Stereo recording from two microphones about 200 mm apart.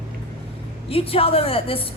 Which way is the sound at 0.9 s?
30° left (ahead or behind).